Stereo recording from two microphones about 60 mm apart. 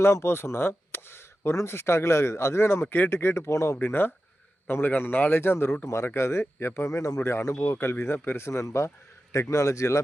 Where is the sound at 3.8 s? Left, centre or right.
Left.